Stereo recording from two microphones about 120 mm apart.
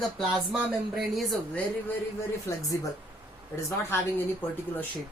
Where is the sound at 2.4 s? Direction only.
25° left (ahead or behind).